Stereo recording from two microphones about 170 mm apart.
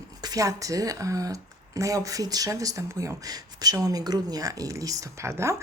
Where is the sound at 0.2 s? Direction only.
20° right (ahead or behind).